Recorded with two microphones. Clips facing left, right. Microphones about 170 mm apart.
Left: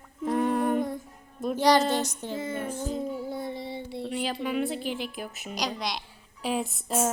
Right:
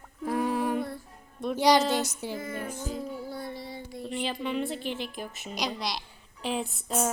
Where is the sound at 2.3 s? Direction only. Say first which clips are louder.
Left 6 dB; 25° left (ahead or behind).